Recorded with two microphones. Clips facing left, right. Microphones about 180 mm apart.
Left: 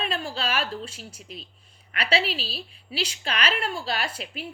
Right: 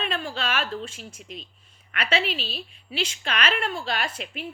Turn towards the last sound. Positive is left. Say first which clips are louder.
# right 1 dB
turn(degrees=35)  # may be behind; listen again after turning